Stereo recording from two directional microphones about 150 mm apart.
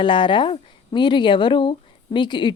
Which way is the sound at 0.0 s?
35° left (ahead or behind).